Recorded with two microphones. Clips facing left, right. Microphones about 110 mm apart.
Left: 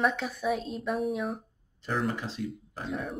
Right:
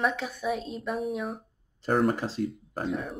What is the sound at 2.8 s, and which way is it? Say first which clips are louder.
Speech: right 2 dB; centre (ahead or behind).